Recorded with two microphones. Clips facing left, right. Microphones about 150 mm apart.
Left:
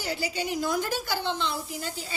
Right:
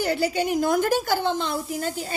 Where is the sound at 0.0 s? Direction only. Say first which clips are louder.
Right 8 dB; 55° right (ahead or behind).